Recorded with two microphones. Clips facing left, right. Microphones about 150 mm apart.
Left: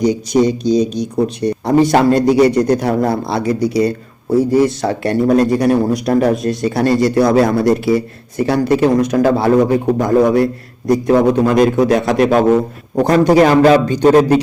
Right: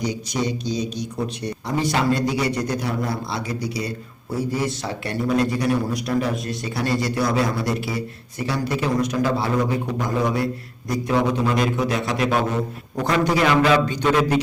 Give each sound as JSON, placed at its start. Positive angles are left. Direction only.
{"t": 0.0, "sound": "a man's voice", "side_deg": 45}